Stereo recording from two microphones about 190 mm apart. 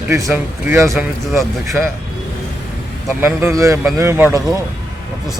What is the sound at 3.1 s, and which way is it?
Speech, 15° right (ahead or behind).